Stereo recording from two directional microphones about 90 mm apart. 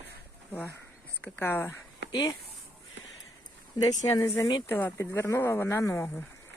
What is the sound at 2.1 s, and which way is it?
Speech, 40° left (ahead or behind).